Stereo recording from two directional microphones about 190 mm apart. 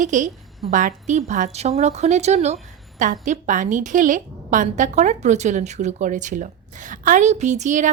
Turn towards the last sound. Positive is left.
turn(degrees=-40)  # may be behind; listen again after turning